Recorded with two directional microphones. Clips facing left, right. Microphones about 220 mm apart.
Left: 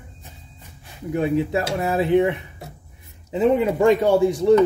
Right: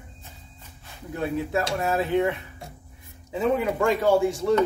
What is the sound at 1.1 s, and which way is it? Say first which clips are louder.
Speech: left 6 dB; 15° left (ahead or behind).